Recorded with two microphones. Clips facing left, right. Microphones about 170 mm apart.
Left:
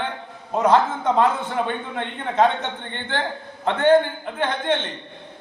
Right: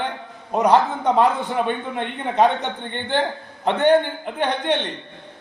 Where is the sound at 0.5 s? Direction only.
15° right (ahead or behind).